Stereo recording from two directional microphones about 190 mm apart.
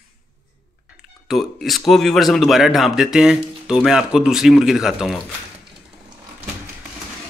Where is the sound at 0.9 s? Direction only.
Centre (ahead or behind).